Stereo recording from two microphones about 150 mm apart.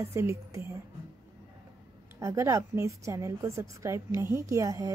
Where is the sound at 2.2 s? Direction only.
20° right (ahead or behind).